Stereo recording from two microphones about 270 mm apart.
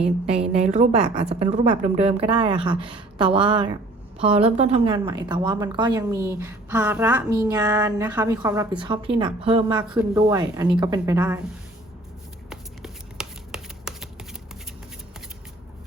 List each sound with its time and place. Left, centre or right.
0.3 s a woman's voice: right
12.5 s shuffling cards: centre